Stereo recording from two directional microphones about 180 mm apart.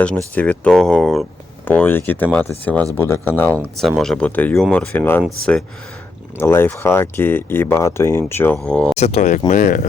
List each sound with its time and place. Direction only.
0.0 s speech: 5° left (ahead or behind)
6.3 s speech: 15° left (ahead or behind)
9.0 s speech: 35° left (ahead or behind)
9.5 s speech: 50° left (ahead or behind)